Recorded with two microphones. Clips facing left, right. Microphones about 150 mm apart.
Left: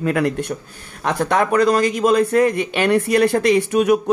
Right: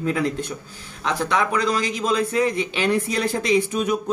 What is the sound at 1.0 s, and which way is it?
A man's voice, 50° left (ahead or behind).